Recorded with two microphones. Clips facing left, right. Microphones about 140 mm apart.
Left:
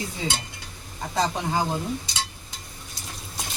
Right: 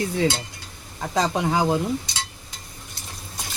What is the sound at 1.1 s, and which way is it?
Speech, 90° right.